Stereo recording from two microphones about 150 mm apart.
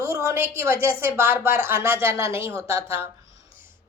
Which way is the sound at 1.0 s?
20° right (ahead or behind).